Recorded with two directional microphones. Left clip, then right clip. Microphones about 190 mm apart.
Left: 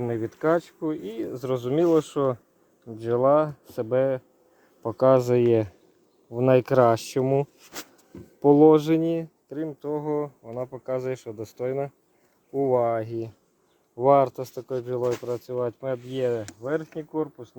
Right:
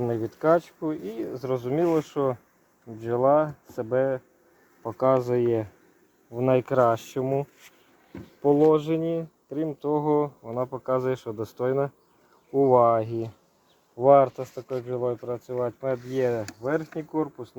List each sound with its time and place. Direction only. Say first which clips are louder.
0.0 s speech: right 1 dB; 35° left (ahead or behind); by 5.6 s 60° left (ahead or behind)
6.3 s speech: left 3 dB; 45° left (ahead or behind)
9.5 s speech: right 4 dB; centre (ahead or behind)
13.9 s speech: right 1 dB; 35° left (ahead or behind)
16.5 s speech: right 1 dB; 25° left (ahead or behind)